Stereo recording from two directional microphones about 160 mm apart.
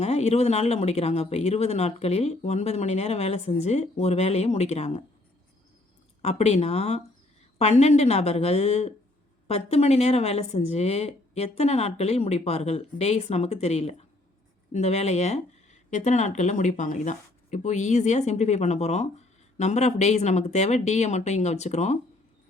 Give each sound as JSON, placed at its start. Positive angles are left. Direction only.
{"t": 0.0, "sound": "speech", "side_deg": 40}
{"t": 6.2, "sound": "speech", "side_deg": 45}